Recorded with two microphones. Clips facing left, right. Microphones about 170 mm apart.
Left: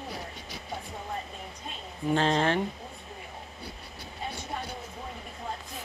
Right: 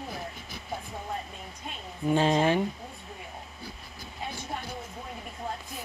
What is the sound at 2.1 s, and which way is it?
Speech, 10° right (ahead or behind).